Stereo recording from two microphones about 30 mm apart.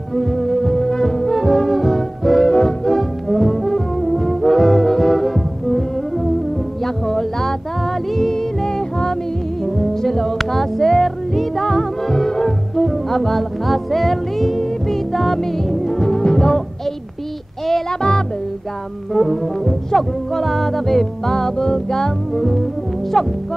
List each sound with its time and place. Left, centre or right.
0.1 s music: centre
0.7 s music: centre
2.4 s music: left
2.8 s music: centre
19.1 s music: centre
21.4 s music: centre
22.3 s music: centre